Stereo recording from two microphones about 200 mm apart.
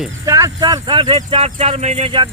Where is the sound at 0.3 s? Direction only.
15° right (ahead or behind).